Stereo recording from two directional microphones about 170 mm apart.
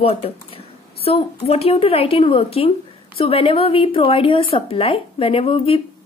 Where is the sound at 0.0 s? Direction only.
35° left (ahead or behind).